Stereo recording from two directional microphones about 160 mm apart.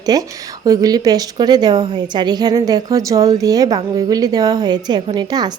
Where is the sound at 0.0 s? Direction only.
25° right (ahead or behind).